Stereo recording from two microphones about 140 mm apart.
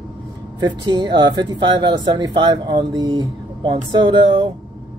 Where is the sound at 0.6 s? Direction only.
30° right (ahead or behind).